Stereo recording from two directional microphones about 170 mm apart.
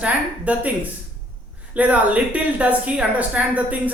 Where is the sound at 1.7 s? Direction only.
10° right (ahead or behind).